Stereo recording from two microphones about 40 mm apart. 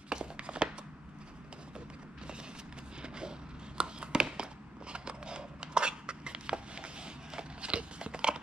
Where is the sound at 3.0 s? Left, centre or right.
Right.